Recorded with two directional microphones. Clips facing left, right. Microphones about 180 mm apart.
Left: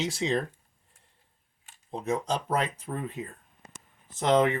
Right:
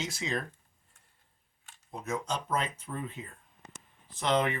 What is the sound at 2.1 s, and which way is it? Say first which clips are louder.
Speech: left 5 dB; 35° left (ahead or behind).